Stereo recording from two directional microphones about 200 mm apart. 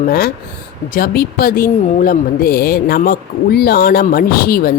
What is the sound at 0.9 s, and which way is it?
A woman's voice, 50° left (ahead or behind).